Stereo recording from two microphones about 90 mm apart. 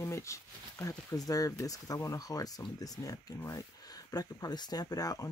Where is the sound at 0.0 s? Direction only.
35° left (ahead or behind).